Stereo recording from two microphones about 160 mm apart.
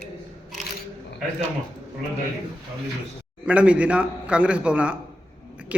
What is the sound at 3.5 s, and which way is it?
Speech, 10° right (ahead or behind).